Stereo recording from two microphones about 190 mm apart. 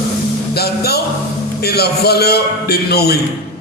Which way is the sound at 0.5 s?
55° left (ahead or behind).